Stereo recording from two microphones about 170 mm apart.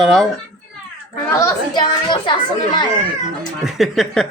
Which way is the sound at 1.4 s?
20° left (ahead or behind).